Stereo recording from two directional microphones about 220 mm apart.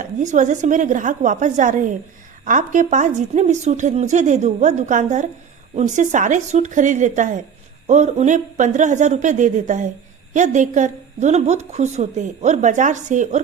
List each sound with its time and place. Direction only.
0.0 s a woman's voice: 35° right (ahead or behind)